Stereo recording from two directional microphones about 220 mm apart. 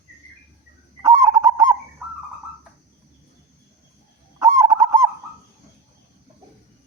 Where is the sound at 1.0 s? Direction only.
15° right (ahead or behind).